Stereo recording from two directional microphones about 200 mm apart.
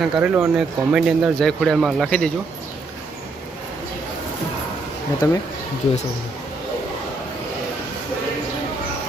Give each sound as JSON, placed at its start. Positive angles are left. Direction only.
{"t": 0.0, "sound": "speech", "side_deg": -10}
{"t": 5.2, "sound": "speech", "side_deg": 15}